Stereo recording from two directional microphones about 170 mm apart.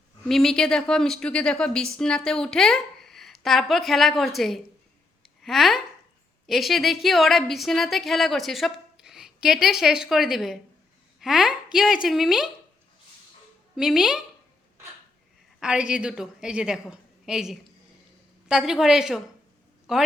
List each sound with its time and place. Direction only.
0.3 s a woman's voice: centre (ahead or behind)
13.7 s a woman's voice: 5° right (ahead or behind)
15.6 s a woman's voice: 5° right (ahead or behind)